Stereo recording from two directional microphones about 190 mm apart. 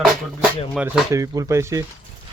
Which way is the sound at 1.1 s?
15° right (ahead or behind).